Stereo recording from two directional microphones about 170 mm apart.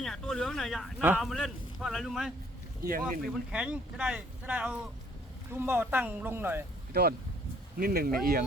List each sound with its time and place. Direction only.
0.0 s a man's voice: centre (ahead or behind)
6.9 s speech: 70° right (ahead or behind)